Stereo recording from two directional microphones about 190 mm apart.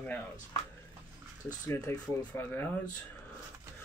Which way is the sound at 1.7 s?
10° left (ahead or behind).